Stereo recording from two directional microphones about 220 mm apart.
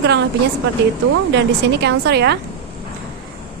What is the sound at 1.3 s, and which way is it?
A woman's voice, 50° right (ahead or behind).